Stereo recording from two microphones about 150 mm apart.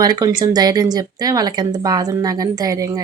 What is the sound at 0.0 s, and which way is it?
A woman's voice, 25° right (ahead or behind).